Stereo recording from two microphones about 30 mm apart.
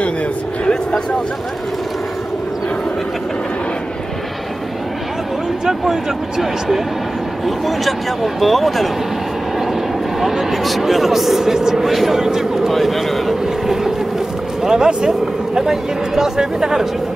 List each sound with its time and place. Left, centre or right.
5.7 s speech: centre
7.4 s speech: centre
10.2 s speech: centre
11.8 s speech: centre
12.1 s speech: centre
12.7 s speech: centre
14.6 s speech: centre
14.9 s speech: right
15.5 s speech: centre